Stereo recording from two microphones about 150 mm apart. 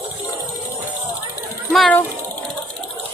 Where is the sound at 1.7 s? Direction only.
Centre (ahead or behind).